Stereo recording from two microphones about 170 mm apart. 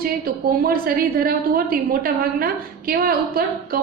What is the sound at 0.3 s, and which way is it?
A woman's voice, 60° right (ahead or behind).